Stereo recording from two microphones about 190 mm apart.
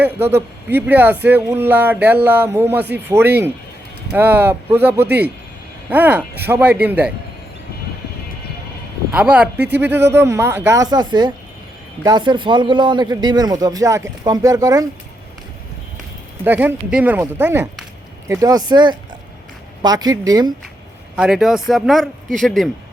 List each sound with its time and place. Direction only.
0.0 s speech: 10° right (ahead or behind)
9.1 s speech: 5° right (ahead or behind)
10.9 s a man's voice: 25° right (ahead or behind)
16.4 s a man's voice: 10° right (ahead or behind)
21.2 s speech: centre (ahead or behind)